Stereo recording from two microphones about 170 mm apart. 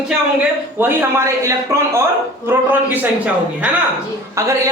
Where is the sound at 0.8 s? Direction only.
15° right (ahead or behind).